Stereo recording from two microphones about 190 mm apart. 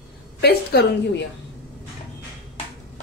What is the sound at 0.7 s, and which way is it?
Speech, 55° left (ahead or behind).